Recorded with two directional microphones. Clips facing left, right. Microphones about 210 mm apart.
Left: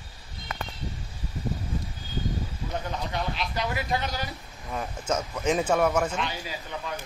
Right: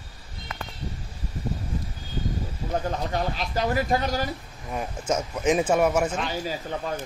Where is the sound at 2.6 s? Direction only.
40° right (ahead or behind).